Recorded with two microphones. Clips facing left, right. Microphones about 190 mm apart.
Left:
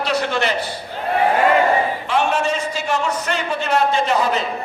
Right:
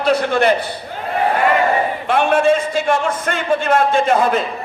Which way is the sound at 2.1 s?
55° right (ahead or behind).